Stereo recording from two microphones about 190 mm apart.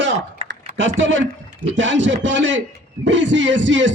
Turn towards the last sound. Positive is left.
turn(degrees=-75)  # may be behind; listen again after turning